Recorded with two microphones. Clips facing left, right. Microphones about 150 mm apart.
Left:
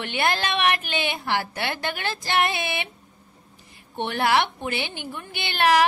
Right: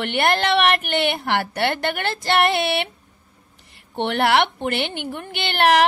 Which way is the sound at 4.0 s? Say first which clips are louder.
Right 4 dB; 70° right (ahead or behind).